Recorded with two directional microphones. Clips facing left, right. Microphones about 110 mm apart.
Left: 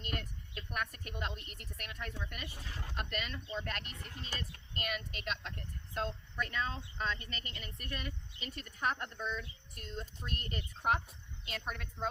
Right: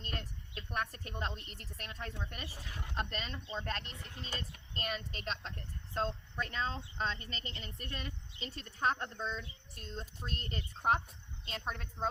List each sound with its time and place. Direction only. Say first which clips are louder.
0.0 s a woman's voice: left 2 dB; 30° right (ahead or behind)